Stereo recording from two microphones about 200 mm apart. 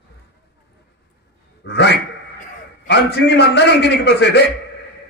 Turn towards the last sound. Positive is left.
turn(degrees=55)  # may be behind; listen again after turning